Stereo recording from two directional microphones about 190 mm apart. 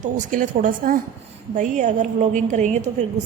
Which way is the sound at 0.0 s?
45° right (ahead or behind).